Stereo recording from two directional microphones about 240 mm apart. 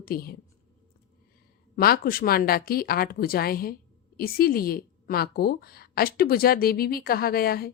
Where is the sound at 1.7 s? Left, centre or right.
Left.